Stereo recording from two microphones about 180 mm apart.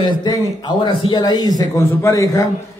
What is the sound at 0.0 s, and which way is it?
A man's voice, 25° left (ahead or behind).